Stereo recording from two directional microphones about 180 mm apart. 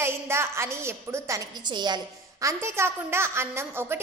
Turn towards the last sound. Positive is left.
turn(degrees=-15)  # may be behind; listen again after turning